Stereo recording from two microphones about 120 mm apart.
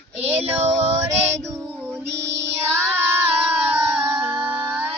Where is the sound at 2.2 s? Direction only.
20° right (ahead or behind).